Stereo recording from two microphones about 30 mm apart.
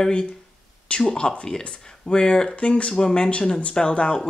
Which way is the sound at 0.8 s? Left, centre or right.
Left.